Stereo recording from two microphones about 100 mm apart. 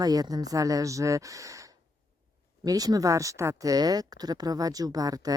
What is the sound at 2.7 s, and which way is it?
Speech, 40° right (ahead or behind).